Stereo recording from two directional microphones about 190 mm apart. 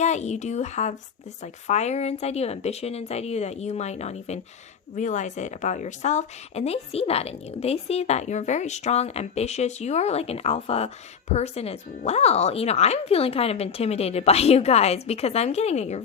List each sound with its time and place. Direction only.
0.0 s a woman's voice: 35° left (ahead or behind)